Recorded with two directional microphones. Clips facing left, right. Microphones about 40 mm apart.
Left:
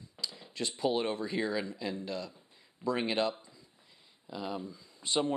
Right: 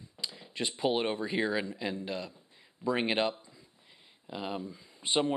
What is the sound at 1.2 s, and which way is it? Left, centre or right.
Speech, right.